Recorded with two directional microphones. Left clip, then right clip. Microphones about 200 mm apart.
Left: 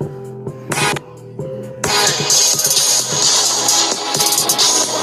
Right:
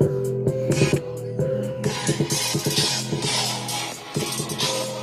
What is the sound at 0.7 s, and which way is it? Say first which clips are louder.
Music: left 10 dB; 50° left (ahead or behind).